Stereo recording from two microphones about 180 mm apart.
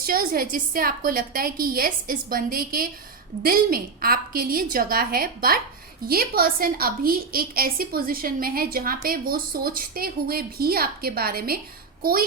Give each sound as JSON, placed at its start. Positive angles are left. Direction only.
{"t": 0.0, "sound": "a woman's voice", "side_deg": -55}